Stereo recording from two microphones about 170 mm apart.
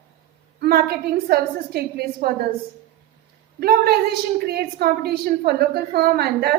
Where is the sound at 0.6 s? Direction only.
65° right (ahead or behind).